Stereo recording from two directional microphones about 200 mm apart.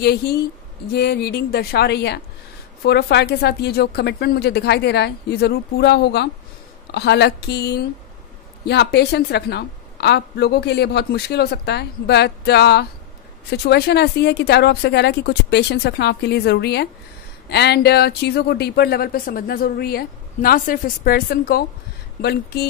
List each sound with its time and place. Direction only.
0.9 s a woman's voice: 50° left (ahead or behind)